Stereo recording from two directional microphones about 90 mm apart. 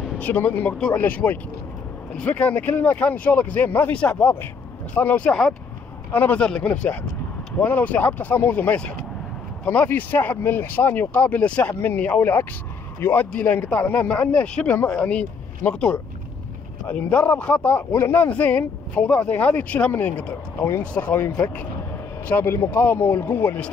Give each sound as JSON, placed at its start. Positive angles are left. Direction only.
{"t": 0.2, "sound": "speech", "side_deg": 20}